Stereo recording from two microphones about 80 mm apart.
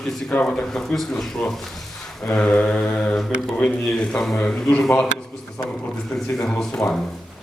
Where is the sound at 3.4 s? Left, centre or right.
Centre.